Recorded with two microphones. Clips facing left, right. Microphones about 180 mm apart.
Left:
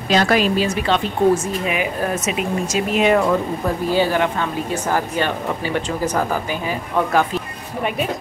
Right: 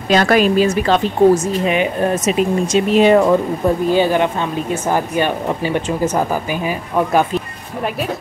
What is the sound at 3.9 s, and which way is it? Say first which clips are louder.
Speech: right 3 dB; 20° right (ahead or behind).